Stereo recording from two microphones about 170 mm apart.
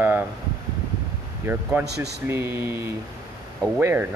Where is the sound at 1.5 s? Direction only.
15° right (ahead or behind).